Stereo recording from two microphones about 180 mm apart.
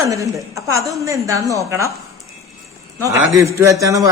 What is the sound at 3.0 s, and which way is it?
A woman's voice, 15° right (ahead or behind).